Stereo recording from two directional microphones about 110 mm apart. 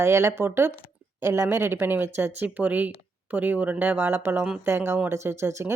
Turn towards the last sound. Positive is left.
turn(degrees=-25)  # may be behind; listen again after turning